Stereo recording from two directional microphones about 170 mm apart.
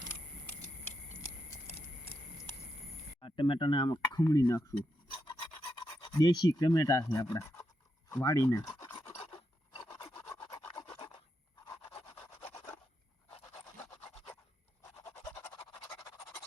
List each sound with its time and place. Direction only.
3.2 s speech: 30° left (ahead or behind)
5.1 s filing: 25° left (ahead or behind)
8.1 s speech: 20° left (ahead or behind)
9.0 s filing: 15° left (ahead or behind)
9.7 s rub: 25° left (ahead or behind)
10.8 s filing: 25° left (ahead or behind)
11.6 s rub: 20° left (ahead or behind)
14.9 s a sound: 15° left (ahead or behind)